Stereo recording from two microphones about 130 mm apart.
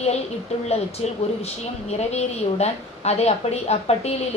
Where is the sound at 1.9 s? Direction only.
55° left (ahead or behind).